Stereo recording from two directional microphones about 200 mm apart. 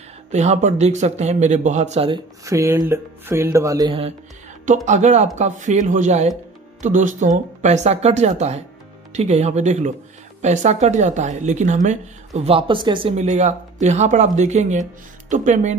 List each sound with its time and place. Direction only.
0.3 s speech: 35° right (ahead or behind)
2.4 s speech: 15° right (ahead or behind)
4.8 s speech: 35° right (ahead or behind)